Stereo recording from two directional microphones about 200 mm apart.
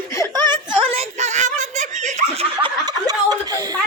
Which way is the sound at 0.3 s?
25° right (ahead or behind).